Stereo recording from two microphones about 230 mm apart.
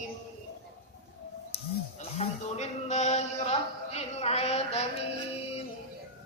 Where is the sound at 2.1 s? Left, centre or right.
Left.